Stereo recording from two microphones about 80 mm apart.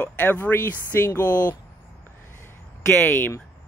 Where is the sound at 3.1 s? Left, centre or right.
Left.